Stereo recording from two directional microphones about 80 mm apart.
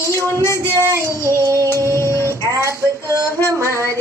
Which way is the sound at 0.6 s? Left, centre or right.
Left.